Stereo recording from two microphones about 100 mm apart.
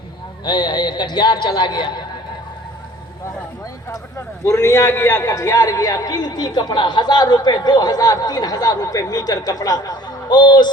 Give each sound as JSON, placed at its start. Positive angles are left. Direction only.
{"t": 0.4, "sound": "a man's voice", "side_deg": 45}
{"t": 4.4, "sound": "a man's voice", "side_deg": 30}